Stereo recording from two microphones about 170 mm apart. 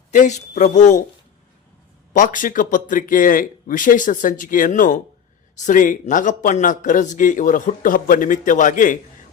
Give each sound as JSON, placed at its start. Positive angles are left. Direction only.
{"t": 0.1, "sound": "a man's voice", "side_deg": 45}
{"t": 2.1, "sound": "a man's voice", "side_deg": 50}